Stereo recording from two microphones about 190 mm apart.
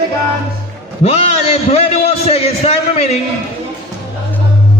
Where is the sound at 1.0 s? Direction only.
30° left (ahead or behind).